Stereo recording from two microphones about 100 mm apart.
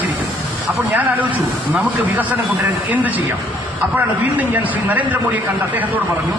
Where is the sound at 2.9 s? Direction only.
15° right (ahead or behind).